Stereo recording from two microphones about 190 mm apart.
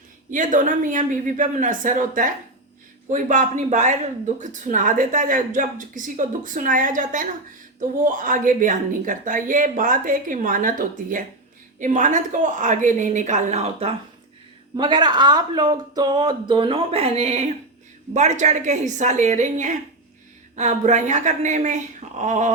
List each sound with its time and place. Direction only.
0.3 s a woman's voice: 40° right (ahead or behind)